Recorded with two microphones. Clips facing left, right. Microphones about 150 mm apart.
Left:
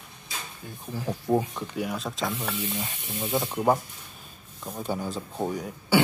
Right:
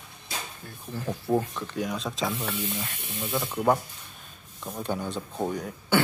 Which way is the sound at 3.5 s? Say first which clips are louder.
Right 1 dB; 10° left (ahead or behind).